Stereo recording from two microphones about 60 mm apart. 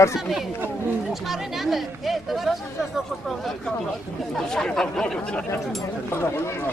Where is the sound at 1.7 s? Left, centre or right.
Centre.